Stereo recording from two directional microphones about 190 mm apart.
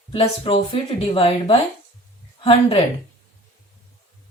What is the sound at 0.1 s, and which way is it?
A woman's voice, 30° left (ahead or behind).